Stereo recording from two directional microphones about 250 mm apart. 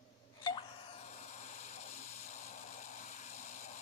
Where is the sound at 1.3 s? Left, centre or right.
Left.